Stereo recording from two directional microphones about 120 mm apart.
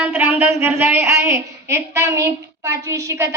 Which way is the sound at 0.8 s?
20° right (ahead or behind).